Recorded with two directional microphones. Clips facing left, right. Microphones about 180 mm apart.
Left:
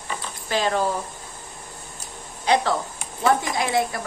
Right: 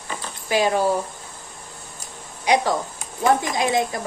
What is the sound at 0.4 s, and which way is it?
Speech, 15° right (ahead or behind).